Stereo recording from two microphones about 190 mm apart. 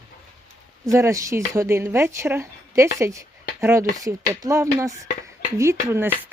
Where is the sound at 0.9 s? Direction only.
15° right (ahead or behind).